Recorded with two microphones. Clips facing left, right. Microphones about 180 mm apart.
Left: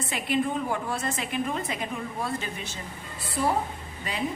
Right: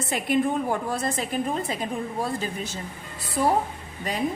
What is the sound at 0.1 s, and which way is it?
A woman's voice, 45° right (ahead or behind).